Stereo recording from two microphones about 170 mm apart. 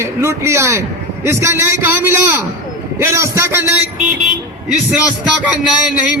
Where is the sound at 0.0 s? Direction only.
15° right (ahead or behind).